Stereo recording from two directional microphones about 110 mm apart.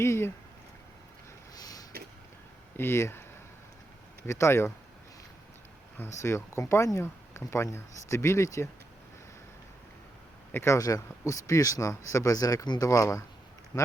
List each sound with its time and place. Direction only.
0.0 s speech: 25° left (ahead or behind)
1.5 s a sound: 35° left (ahead or behind)
2.7 s speech: 20° left (ahead or behind)
6.2 s speech: 25° left (ahead or behind)
10.5 s speech: 25° left (ahead or behind)
13.7 s speech: 40° left (ahead or behind)